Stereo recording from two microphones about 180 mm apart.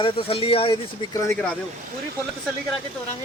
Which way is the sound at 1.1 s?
15° left (ahead or behind).